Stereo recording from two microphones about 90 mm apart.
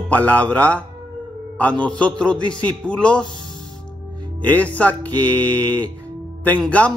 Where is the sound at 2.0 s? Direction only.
10° left (ahead or behind).